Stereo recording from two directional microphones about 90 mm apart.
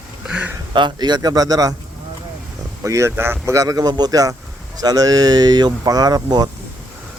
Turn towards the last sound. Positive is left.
turn(degrees=-45)  # may be behind; listen again after turning